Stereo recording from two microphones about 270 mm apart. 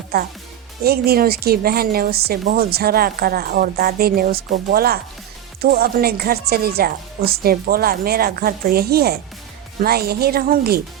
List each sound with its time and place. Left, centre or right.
0.1 s speech: right